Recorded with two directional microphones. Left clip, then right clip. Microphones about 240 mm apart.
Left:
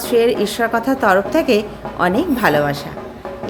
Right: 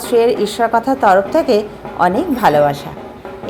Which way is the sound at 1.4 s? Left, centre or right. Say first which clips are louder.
Right 2 dB; left.